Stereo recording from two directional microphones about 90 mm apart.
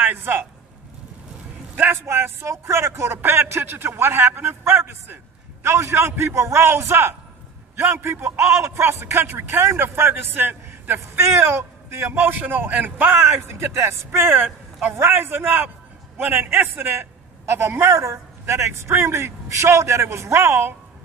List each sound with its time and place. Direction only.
0.0 s a man's voice: 20° right (ahead or behind)
1.8 s a man's voice: 25° right (ahead or behind)